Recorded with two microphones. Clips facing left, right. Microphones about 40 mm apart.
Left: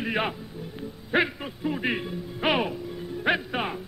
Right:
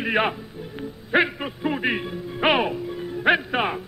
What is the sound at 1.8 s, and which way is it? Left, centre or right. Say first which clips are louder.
Speech: right 3 dB; centre.